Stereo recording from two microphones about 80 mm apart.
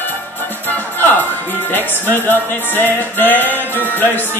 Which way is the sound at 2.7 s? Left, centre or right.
Left.